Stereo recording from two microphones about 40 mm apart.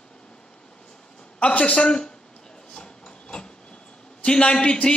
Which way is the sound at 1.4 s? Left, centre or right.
Left.